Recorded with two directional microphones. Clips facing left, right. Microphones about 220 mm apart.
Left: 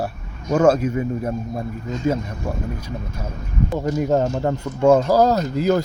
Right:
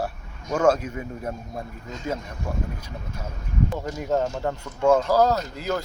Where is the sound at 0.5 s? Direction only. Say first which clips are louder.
Left 5 dB; 5° left (ahead or behind).